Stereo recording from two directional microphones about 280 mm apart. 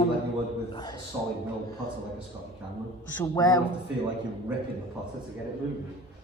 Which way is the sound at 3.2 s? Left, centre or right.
Centre.